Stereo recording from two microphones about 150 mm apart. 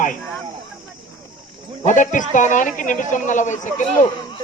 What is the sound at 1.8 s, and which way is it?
A man's voice, 55° left (ahead or behind).